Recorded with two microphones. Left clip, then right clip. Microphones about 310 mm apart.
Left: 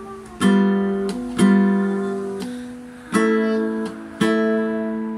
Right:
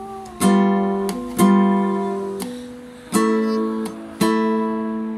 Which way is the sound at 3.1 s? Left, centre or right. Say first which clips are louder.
Even; centre.